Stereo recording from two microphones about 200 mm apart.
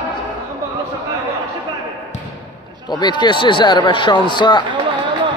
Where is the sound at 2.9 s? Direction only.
20° left (ahead or behind).